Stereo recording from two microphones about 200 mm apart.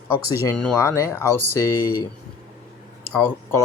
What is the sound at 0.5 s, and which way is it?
Speech, 10° left (ahead or behind).